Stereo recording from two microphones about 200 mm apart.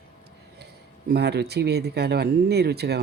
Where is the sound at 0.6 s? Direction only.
55° right (ahead or behind).